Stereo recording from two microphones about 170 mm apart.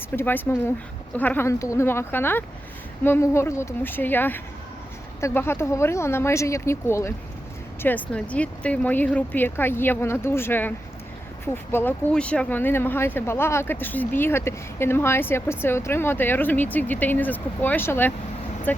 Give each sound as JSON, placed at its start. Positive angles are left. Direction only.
{"t": 0.2, "sound": "speech", "side_deg": 10}